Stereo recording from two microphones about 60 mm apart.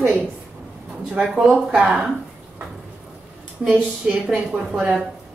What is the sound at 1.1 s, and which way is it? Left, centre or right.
Speech, centre.